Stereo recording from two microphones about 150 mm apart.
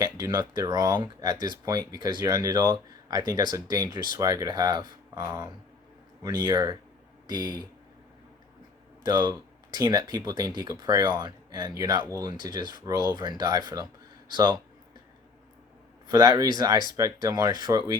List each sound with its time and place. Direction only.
0.0 s speech: 25° right (ahead or behind)
9.0 s speech: 25° right (ahead or behind)
16.0 s speech: 25° right (ahead or behind)